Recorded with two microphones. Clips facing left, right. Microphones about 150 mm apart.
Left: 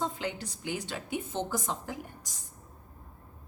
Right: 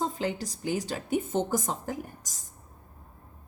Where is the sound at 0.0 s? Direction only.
40° right (ahead or behind).